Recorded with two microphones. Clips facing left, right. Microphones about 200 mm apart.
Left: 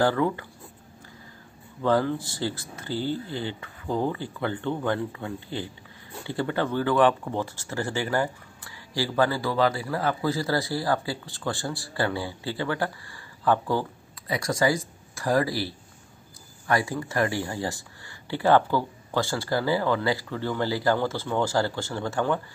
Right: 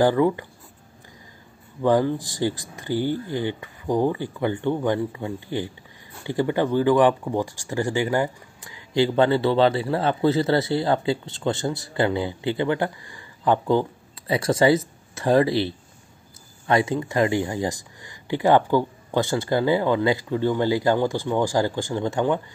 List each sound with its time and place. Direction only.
0.0 s speech: 15° right (ahead or behind)
1.8 s speech: 15° right (ahead or behind)